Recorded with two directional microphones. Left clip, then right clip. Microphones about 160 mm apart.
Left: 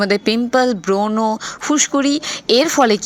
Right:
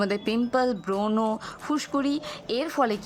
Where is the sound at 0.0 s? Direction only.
20° left (ahead or behind).